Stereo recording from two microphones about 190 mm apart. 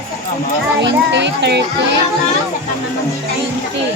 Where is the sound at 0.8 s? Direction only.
70° right (ahead or behind).